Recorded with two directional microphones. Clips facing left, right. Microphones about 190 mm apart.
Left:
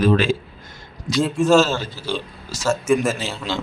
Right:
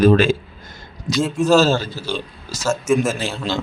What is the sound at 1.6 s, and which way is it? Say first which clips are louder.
Speech: right 3 dB; 35° right (ahead or behind).